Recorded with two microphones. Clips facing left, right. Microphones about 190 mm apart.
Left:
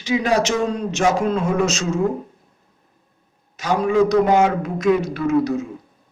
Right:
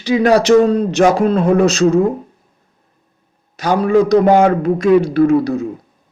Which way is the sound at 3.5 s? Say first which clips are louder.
Right 5 dB; 35° right (ahead or behind).